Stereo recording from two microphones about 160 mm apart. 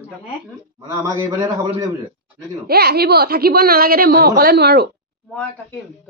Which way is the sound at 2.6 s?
75° right (ahead or behind).